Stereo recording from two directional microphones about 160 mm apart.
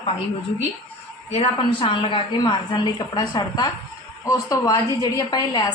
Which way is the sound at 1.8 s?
30° left (ahead or behind).